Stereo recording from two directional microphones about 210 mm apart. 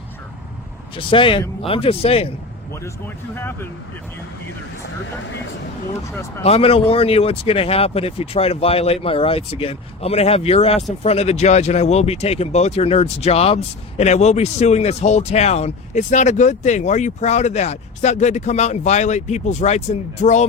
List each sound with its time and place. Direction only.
0.9 s speech: 25° left (ahead or behind)
3.3 s speech: 10° left (ahead or behind)
6.4 s speech: 30° left (ahead or behind)